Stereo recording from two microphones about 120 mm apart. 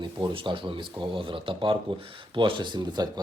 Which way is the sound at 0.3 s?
45° right (ahead or behind).